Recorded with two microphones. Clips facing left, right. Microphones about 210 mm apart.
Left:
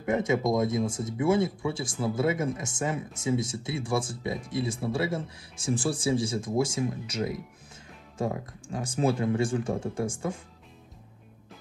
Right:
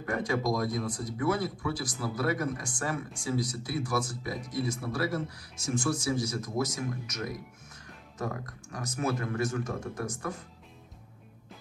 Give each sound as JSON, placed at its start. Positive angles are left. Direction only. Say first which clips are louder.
{"t": 0.0, "sound": "speech", "louder": "left 4 dB", "side_deg": 25}